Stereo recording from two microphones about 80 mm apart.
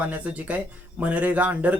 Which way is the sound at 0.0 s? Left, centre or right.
Centre.